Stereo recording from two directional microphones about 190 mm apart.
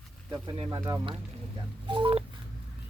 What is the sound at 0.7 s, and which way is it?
Speech, 15° right (ahead or behind).